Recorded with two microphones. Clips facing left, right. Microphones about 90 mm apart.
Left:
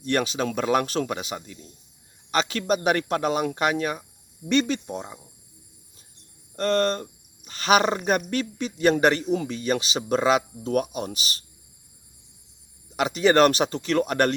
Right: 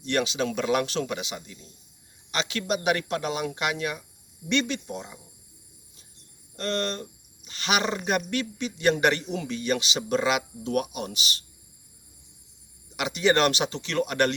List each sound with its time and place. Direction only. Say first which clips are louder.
0.0 s speech: left 2 dB; 40° left (ahead or behind)
6.6 s speech: left 7 dB; 45° left (ahead or behind)
13.0 s speech: left 4 dB; 40° left (ahead or behind)